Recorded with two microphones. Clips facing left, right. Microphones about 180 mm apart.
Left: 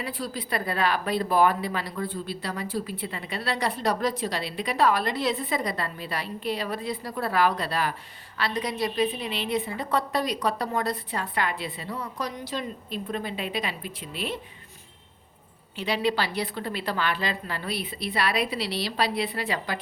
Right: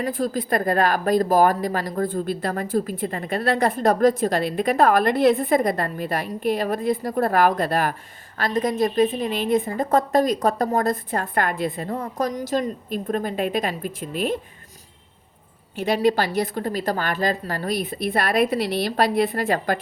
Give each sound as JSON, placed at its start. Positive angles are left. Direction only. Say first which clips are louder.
{"t": 0.0, "sound": "a woman's voice", "louder": "right 9 dB", "side_deg": -45}
{"t": 15.7, "sound": "a woman's voice", "louder": "right 6 dB", "side_deg": -45}